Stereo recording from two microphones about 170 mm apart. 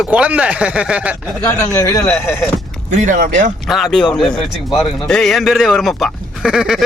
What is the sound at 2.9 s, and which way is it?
Speech, 45° right (ahead or behind).